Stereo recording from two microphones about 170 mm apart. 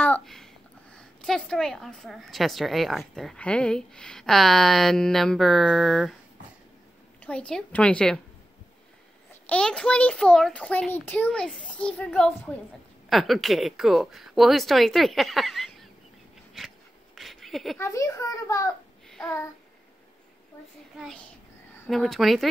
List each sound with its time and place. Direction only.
0.0 s a sound: 5° left (ahead or behind)
0.9 s a woman's voice: 5° left (ahead or behind)
7.2 s a woman's voice: 5° left (ahead or behind)
9.3 s a child's voice: 5° left (ahead or behind)
16.5 s a sound: centre (ahead or behind)
17.7 s a child's voice: 20° left (ahead or behind)
19.0 s child singing: 5° left (ahead or behind)
21.8 s a woman's voice: centre (ahead or behind)